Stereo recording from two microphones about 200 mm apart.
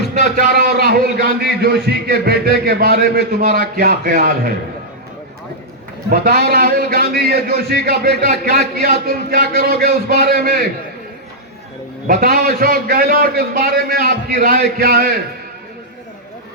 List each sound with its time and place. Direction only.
0.3 s a man's voice: 50° right (ahead or behind)
6.1 s a man's voice: 50° right (ahead or behind)
12.0 s a man's voice: 45° right (ahead or behind)